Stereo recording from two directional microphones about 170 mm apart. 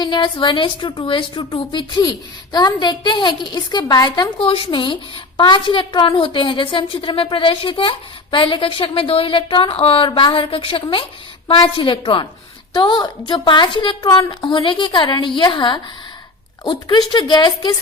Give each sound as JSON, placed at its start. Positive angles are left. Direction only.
{"t": 0.0, "sound": "a woman's voice", "side_deg": 25}